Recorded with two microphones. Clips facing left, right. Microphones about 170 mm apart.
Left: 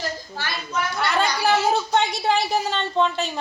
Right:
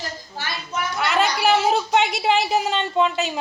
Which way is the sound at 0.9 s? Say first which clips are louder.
Right 2 dB; 5° right (ahead or behind).